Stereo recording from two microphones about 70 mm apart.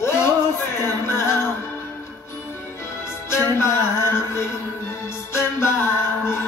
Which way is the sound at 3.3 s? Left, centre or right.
Left.